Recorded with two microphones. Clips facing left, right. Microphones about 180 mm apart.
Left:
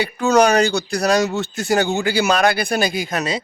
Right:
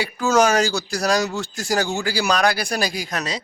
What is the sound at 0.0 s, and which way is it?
Speech, centre (ahead or behind).